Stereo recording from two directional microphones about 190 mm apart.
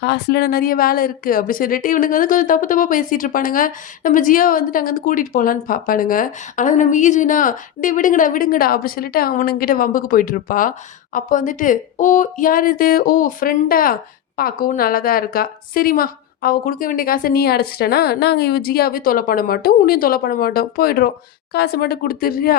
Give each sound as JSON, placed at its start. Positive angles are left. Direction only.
{"t": 0.0, "sound": "speech", "side_deg": 60}